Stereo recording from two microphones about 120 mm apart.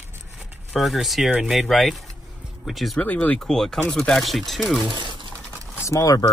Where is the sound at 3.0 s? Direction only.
15° left (ahead or behind).